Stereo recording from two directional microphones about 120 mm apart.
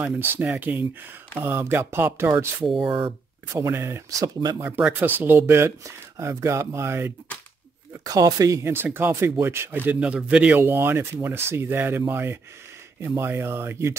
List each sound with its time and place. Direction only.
0.0 s speech: 15° right (ahead or behind)
4.6 s speech: 15° right (ahead or behind)
7.9 s speech: 30° right (ahead or behind)